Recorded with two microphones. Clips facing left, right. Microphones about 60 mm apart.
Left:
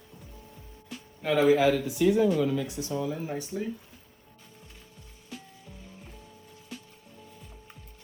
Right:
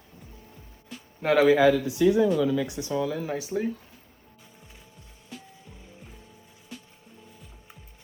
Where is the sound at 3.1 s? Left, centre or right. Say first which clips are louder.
Right 3 dB; right.